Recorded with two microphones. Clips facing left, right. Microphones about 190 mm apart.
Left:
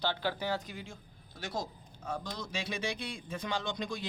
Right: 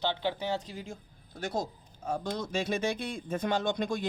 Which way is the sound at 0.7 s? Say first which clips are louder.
Right 4 dB; 40° right (ahead or behind).